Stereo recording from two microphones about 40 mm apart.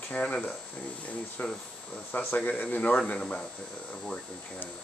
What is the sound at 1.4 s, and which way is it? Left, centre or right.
Speech, left.